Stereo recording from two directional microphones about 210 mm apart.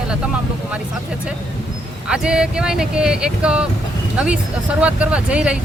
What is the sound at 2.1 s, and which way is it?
Speech, 5° right (ahead or behind).